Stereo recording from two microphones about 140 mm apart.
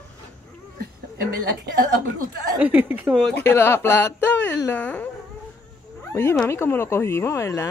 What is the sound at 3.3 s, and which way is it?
A woman's voice, 15° left (ahead or behind).